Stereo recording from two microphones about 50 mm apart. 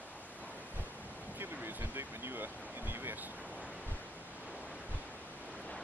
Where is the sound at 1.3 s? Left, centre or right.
Right.